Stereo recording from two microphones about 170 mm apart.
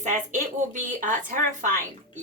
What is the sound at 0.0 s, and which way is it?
Speech, 45° right (ahead or behind).